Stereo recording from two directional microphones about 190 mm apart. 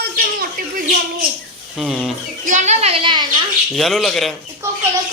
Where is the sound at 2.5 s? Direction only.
40° right (ahead or behind).